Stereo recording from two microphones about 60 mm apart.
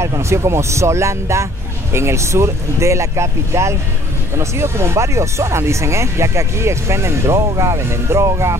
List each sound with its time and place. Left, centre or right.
0.2 s speech: right